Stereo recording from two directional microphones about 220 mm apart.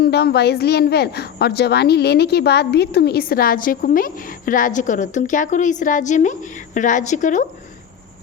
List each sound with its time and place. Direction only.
0.0 s a woman's voice: 45° left (ahead or behind)